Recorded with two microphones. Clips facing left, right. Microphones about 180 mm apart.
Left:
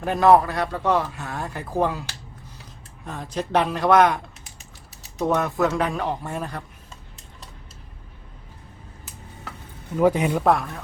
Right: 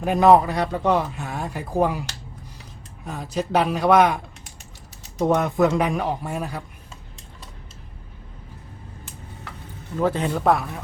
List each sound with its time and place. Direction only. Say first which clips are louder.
0.0 s a man's voice: right 1 dB; 15° right (ahead or behind)
3.1 s a man's voice: right 1 dB; 5° right (ahead or behind)
9.9 s speech: left 3 dB; 10° left (ahead or behind)
10.4 s speech: right 1 dB; centre (ahead or behind)